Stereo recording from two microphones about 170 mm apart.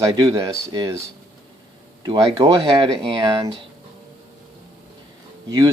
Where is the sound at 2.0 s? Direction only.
20° right (ahead or behind).